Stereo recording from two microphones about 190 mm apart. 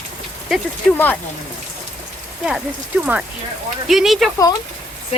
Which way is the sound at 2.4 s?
5° right (ahead or behind).